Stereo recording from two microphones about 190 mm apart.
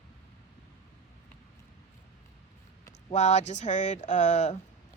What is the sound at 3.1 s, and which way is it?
Speech, 35° left (ahead or behind).